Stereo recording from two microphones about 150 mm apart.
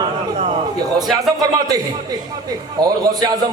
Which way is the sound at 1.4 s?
25° right (ahead or behind).